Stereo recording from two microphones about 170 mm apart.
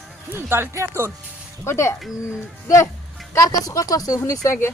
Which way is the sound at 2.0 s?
Centre (ahead or behind).